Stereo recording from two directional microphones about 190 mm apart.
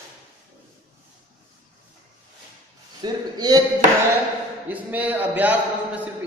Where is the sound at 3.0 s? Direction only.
20° right (ahead or behind).